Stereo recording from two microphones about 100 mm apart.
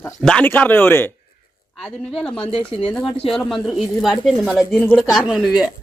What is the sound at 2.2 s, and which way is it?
Speech, 10° left (ahead or behind).